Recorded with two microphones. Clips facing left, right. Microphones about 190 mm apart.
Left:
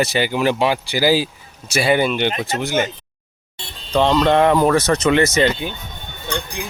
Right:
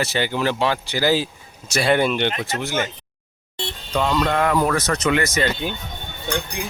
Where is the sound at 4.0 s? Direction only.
30° left (ahead or behind).